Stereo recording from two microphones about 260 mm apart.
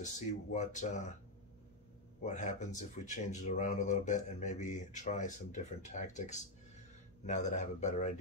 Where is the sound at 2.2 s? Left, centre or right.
Left.